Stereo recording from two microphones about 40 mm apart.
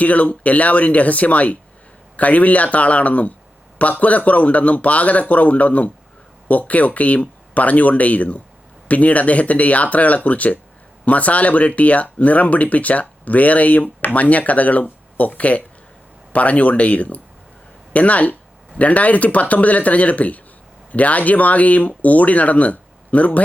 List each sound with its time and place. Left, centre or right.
0.0 s speech: left